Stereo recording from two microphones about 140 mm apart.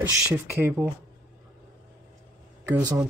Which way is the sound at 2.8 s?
25° right (ahead or behind).